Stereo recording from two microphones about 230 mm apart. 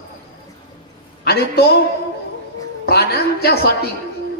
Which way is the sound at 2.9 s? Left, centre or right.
Left.